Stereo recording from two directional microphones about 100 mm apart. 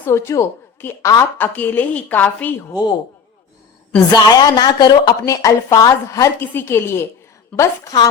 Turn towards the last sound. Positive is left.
turn(degrees=30)  # may be behind; listen again after turning